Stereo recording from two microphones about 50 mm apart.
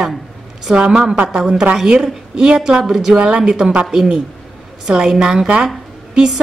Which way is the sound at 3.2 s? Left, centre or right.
Centre.